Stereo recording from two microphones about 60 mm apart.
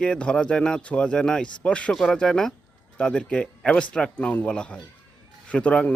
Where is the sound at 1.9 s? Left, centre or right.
Centre.